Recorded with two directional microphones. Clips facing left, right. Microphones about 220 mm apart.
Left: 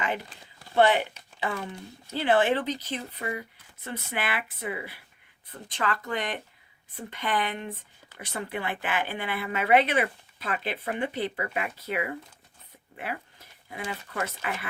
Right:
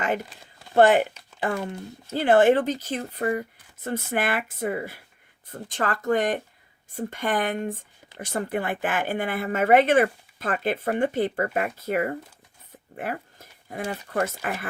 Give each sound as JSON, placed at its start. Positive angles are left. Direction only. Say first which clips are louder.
{"t": 0.7, "sound": "speech", "louder": "right 5 dB", "side_deg": -45}